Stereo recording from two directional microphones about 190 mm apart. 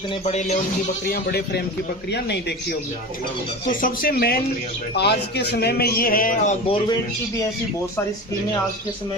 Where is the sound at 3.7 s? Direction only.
45° left (ahead or behind).